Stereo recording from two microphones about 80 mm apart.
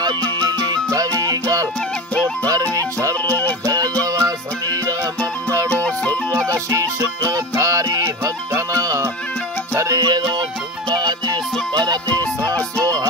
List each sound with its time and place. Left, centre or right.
0.9 s music: right
2.4 s music: right
3.3 s music: left
4.0 s music: right
6.7 s music: right